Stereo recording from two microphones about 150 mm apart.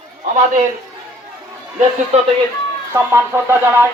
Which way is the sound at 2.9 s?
15° right (ahead or behind).